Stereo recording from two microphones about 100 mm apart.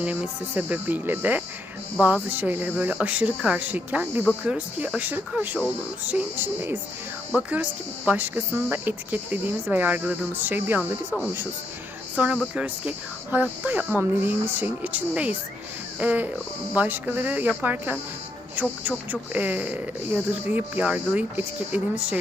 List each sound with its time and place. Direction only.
0.0 s speech: 15° right (ahead or behind)
12.1 s speech: 10° right (ahead or behind)